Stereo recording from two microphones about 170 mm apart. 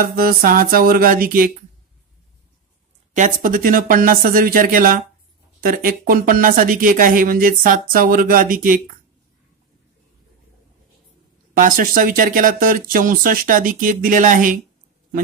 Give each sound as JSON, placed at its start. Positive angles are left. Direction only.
{"t": 0.0, "sound": "speech", "side_deg": -60}
{"t": 3.2, "sound": "speech", "side_deg": -50}
{"t": 11.5, "sound": "speech", "side_deg": -55}